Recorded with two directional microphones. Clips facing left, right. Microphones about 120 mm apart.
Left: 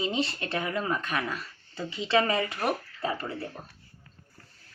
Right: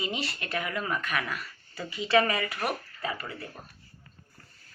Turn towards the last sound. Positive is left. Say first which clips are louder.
# left 3 dB
turn(degrees=30)  # may be behind; listen again after turning